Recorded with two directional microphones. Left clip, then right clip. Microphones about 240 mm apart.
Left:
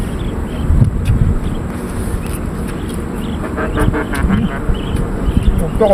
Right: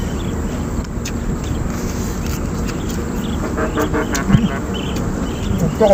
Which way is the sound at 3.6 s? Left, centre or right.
Left.